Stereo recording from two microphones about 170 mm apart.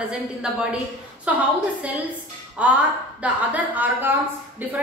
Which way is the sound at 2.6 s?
5° right (ahead or behind).